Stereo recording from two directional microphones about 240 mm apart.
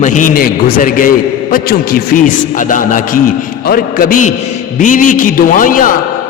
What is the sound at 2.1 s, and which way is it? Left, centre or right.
A man's voice, left.